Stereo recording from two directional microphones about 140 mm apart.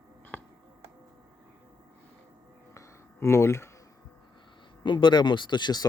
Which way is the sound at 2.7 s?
20° left (ahead or behind).